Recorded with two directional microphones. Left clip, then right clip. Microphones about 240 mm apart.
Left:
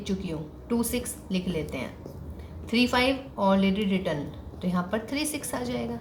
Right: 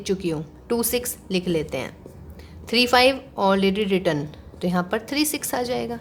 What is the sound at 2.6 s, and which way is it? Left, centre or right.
A woman's voice, right.